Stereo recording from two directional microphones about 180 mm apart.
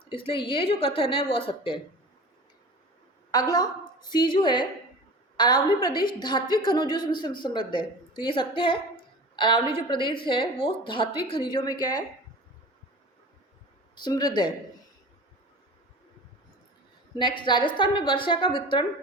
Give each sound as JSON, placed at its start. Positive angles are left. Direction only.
{"t": 0.1, "sound": "a woman's voice", "side_deg": 30}
{"t": 3.3, "sound": "a woman's voice", "side_deg": 20}
{"t": 9.3, "sound": "a sound", "side_deg": 25}
{"t": 9.7, "sound": "a woman's voice", "side_deg": 25}
{"t": 13.9, "sound": "a woman's voice", "side_deg": 20}
{"t": 17.2, "sound": "a woman's voice", "side_deg": 25}